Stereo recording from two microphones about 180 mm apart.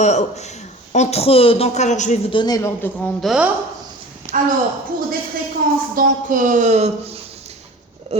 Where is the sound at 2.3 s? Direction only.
25° left (ahead or behind).